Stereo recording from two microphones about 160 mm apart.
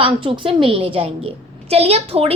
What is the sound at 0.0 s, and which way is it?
A woman's voice, 35° right (ahead or behind).